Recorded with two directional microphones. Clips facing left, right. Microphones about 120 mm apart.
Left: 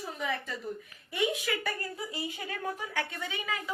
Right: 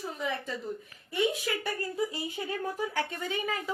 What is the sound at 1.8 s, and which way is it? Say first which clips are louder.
A woman's voice: right 5 dB; 30° right (ahead or behind).